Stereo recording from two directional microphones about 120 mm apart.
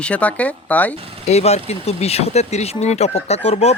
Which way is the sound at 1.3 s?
65° left (ahead or behind).